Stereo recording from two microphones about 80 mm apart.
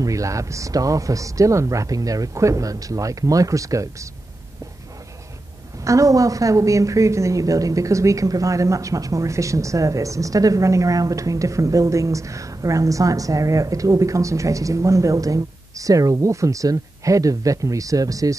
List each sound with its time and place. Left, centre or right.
0.0 s a woman's voice: right
5.9 s a woman's voice: right